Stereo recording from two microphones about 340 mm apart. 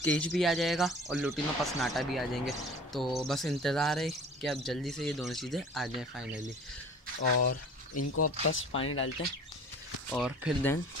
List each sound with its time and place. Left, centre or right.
0.0 s speech: centre
8.0 s speech: left
10.1 s speech: centre